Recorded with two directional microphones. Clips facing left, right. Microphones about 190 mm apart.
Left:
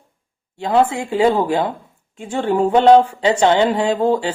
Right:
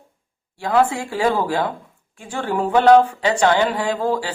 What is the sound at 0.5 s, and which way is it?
A woman's voice, 20° left (ahead or behind).